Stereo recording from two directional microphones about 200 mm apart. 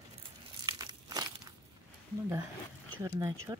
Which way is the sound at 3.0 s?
10° right (ahead or behind).